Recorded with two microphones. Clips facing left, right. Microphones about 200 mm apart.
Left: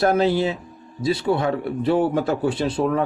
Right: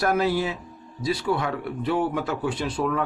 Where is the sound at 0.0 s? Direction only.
25° left (ahead or behind).